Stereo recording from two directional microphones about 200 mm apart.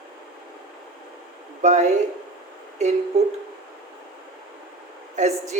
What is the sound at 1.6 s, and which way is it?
Speech, 35° right (ahead or behind).